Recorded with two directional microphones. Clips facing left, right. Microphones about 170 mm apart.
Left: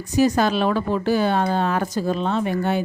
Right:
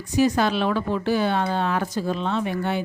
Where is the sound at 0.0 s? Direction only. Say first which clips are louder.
Left 2 dB; 40° left (ahead or behind).